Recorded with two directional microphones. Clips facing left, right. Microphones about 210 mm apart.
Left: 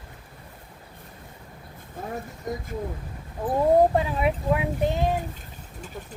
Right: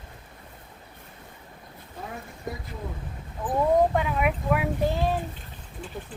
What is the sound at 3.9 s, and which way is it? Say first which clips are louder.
Speech: left 2 dB; 30° left (ahead or behind).